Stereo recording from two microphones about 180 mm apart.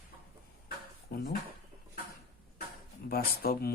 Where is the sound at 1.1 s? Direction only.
55° left (ahead or behind).